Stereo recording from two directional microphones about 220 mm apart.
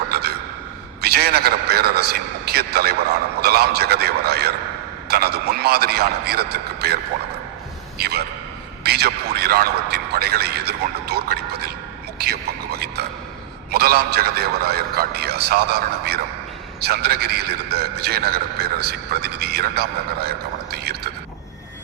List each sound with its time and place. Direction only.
0.1 s gasp: 45° right (ahead or behind)
1.0 s a man's voice: 45° right (ahead or behind)